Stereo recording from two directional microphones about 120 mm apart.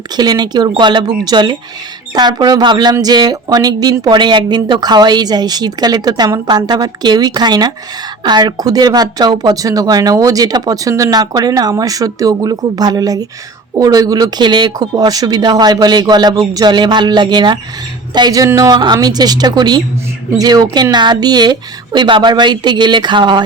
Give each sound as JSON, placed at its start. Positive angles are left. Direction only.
{"t": 0.2, "sound": "speech", "side_deg": -35}